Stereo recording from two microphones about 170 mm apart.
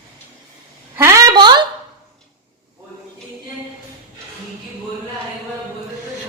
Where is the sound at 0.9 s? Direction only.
15° right (ahead or behind).